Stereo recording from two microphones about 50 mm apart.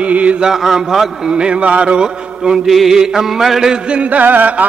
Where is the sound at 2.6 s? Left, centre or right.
Centre.